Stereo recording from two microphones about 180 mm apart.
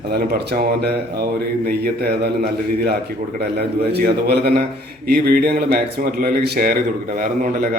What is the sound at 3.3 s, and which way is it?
Speech, 65° right (ahead or behind).